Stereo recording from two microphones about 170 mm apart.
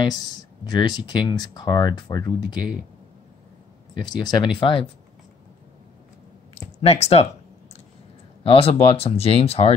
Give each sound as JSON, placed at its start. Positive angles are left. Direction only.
{"t": 0.0, "sound": "speech", "side_deg": 25}
{"t": 4.0, "sound": "speech", "side_deg": 25}
{"t": 6.8, "sound": "speech", "side_deg": 35}
{"t": 8.5, "sound": "speech", "side_deg": 35}